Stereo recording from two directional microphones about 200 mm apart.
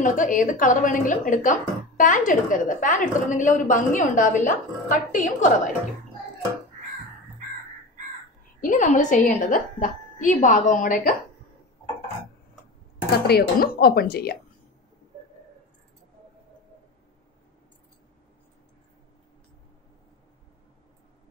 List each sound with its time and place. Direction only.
0.0 s speech: 40° left (ahead or behind)
8.5 s speech: 40° left (ahead or behind)
13.3 s speech: 50° left (ahead or behind)